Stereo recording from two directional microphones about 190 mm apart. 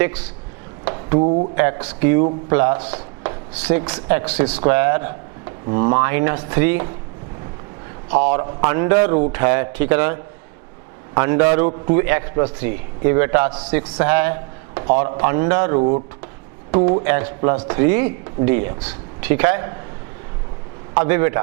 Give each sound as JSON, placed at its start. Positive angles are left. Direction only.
{"t": 0.0, "sound": "a man's voice", "side_deg": -10}
{"t": 1.2, "sound": "speech", "side_deg": -40}
{"t": 1.5, "sound": "a man's voice", "side_deg": -10}
{"t": 8.1, "sound": "a man's voice", "side_deg": -15}
{"t": 15.8, "sound": "speech", "side_deg": -35}
{"t": 17.0, "sound": "a man's voice", "side_deg": -15}
{"t": 20.9, "sound": "a man's voice", "side_deg": -15}